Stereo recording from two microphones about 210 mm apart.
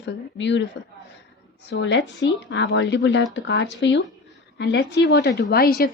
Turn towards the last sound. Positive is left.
turn(degrees=45)  # may be behind; listen again after turning